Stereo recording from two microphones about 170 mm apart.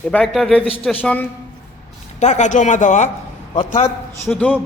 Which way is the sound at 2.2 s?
45° left (ahead or behind).